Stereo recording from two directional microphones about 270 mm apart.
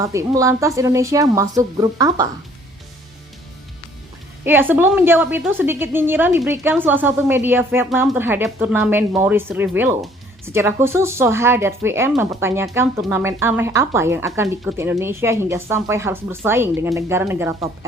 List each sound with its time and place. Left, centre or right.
0.0 s a woman's voice: centre
4.4 s a woman's voice: centre